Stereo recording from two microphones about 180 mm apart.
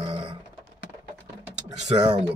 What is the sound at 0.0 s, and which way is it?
Typing, 30° right (ahead or behind).